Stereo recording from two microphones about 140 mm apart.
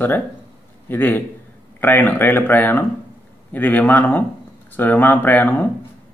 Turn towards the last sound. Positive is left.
turn(degrees=15)  # may be behind; listen again after turning